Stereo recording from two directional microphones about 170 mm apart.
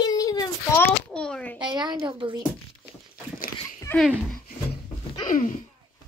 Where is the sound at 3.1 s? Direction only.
55° left (ahead or behind).